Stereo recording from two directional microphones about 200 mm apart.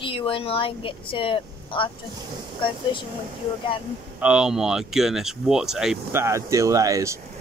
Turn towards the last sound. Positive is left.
turn(degrees=-15)  # may be behind; listen again after turning